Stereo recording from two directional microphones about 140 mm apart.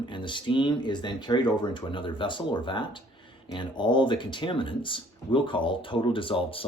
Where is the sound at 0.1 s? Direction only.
35° left (ahead or behind).